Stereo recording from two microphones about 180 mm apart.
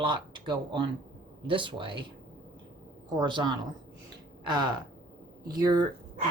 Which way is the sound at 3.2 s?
25° right (ahead or behind).